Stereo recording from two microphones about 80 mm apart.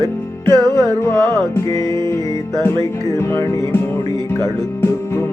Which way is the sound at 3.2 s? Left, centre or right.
Left.